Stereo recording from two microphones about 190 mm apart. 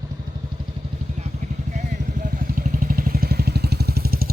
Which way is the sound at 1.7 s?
40° right (ahead or behind).